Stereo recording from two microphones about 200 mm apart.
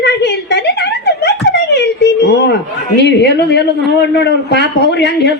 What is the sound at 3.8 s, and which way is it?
A man's voice, 55° left (ahead or behind).